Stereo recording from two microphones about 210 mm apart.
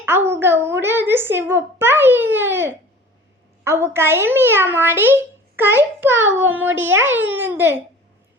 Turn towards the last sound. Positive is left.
turn(degrees=-10)  # may be behind; listen again after turning